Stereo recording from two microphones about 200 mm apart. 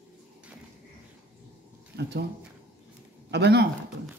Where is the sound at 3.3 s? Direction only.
55° right (ahead or behind).